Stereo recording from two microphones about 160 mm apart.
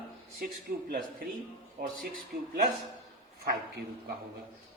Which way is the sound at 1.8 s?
60° right (ahead or behind).